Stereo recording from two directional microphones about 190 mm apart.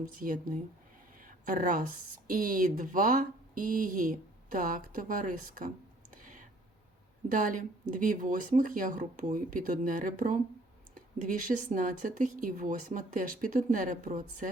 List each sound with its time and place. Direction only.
0.2 s speech: 45° right (ahead or behind)
1.2 s a sound: 45° right (ahead or behind)
2.2 s speech: 45° right (ahead or behind)
6.2 s whispering: 40° right (ahead or behind)
7.3 s speech: 45° right (ahead or behind)